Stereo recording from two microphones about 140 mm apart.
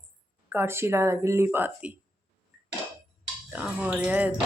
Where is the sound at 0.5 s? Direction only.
15° right (ahead or behind).